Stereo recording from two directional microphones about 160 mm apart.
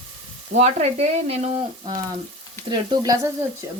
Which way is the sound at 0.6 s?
40° right (ahead or behind).